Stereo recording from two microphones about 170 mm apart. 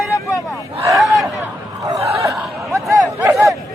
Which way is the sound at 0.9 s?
Centre (ahead or behind).